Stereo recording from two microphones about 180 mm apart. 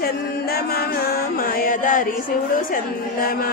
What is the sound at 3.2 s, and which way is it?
Mantra, 55° left (ahead or behind).